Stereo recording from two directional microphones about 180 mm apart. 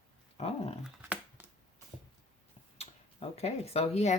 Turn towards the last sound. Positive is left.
turn(degrees=35)  # may be behind; listen again after turning